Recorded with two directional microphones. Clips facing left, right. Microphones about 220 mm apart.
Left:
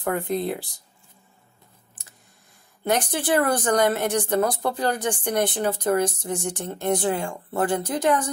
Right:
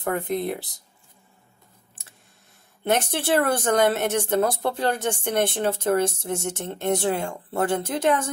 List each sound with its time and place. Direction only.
0.2 s speech: 20° right (ahead or behind)
2.0 s a sound: 30° right (ahead or behind)
2.8 s speech: 25° right (ahead or behind)